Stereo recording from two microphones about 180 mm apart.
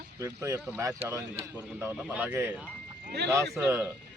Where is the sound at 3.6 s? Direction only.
15° right (ahead or behind).